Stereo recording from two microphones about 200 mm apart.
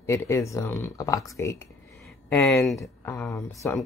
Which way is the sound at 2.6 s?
Centre (ahead or behind).